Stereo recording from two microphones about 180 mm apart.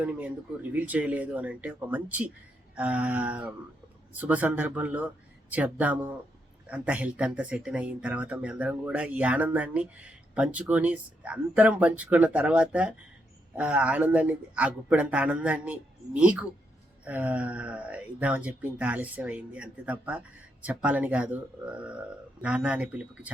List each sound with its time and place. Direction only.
0.0 s speech: 10° right (ahead or behind)